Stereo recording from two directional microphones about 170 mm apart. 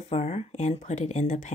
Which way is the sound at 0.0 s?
40° left (ahead or behind).